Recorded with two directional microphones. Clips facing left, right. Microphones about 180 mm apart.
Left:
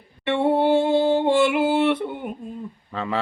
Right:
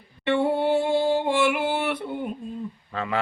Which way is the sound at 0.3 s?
25° left (ahead or behind).